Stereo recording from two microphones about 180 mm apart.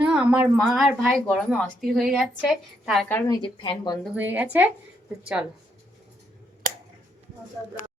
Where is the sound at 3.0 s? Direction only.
15° left (ahead or behind).